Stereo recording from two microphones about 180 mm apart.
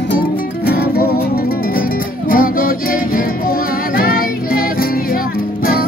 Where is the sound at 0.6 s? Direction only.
60° left (ahead or behind).